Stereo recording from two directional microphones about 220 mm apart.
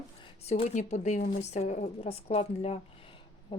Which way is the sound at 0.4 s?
30° left (ahead or behind).